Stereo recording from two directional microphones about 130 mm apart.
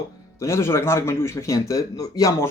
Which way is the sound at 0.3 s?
20° left (ahead or behind).